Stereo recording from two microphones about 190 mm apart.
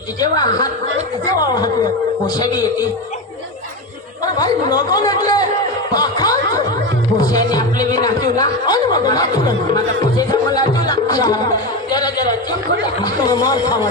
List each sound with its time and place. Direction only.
0.2 s speech: 20° left (ahead or behind)
4.2 s a man's voice: 20° left (ahead or behind)